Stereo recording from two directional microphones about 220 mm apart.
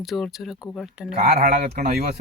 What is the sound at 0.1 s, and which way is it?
Speech, centre (ahead or behind).